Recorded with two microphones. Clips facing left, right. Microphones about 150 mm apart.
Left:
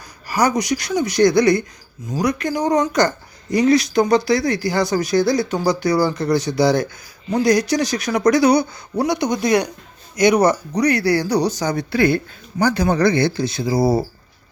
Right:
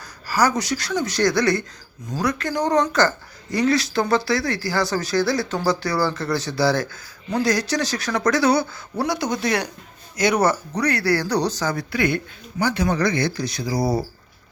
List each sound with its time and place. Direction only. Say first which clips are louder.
0.3 s speech: left 2 dB; 15° left (ahead or behind)
11.9 s speech: left 5 dB; 30° left (ahead or behind)